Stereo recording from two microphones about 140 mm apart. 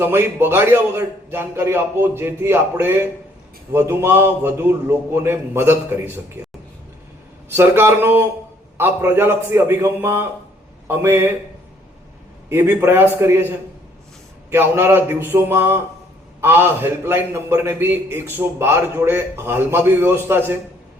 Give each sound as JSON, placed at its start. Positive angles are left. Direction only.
{"t": 0.0, "sound": "a man's voice", "side_deg": -15}
{"t": 7.5, "sound": "a man's voice", "side_deg": -15}
{"t": 12.5, "sound": "a man's voice", "side_deg": -15}
{"t": 14.5, "sound": "a man's voice", "side_deg": -15}